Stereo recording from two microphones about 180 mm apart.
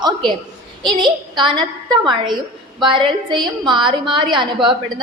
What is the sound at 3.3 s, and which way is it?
A woman's voice, 25° right (ahead or behind).